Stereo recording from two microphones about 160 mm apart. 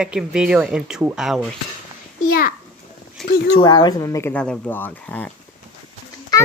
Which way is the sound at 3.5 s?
25° left (ahead or behind).